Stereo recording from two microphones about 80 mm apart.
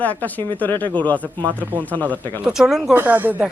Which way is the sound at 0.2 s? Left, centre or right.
Left.